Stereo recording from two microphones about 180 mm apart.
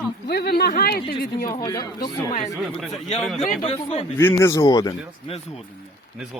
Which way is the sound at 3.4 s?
40° left (ahead or behind).